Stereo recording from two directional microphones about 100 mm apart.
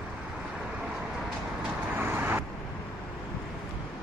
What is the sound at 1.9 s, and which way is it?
Vehicle, 20° right (ahead or behind).